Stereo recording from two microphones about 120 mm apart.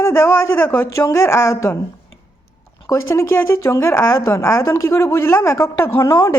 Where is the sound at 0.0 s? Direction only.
20° left (ahead or behind).